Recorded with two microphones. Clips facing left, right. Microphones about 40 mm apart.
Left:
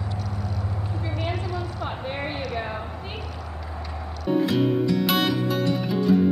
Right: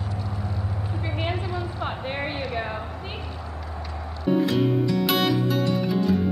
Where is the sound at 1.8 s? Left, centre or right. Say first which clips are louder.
Right 2 dB; centre.